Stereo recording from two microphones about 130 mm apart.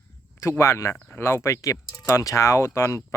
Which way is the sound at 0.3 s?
20° left (ahead or behind).